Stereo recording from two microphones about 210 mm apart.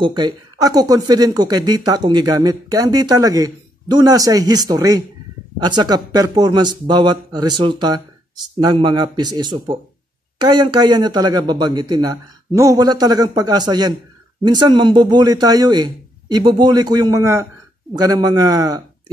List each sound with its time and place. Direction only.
0.0 s speech: 20° right (ahead or behind)